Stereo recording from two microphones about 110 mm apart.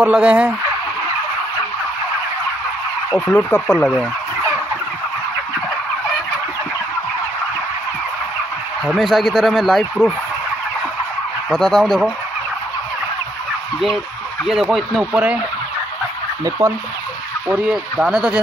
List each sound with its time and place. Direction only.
0.0 s speech: 10° right (ahead or behind)
3.2 s speech: 10° left (ahead or behind)
8.8 s a man's voice: centre (ahead or behind)
11.5 s a man's voice: centre (ahead or behind)
14.7 s a man's voice: centre (ahead or behind)
16.4 s speech: 30° right (ahead or behind)
17.5 s speech: 15° right (ahead or behind)